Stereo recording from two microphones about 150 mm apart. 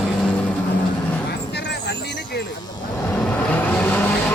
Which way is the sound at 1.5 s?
90° left.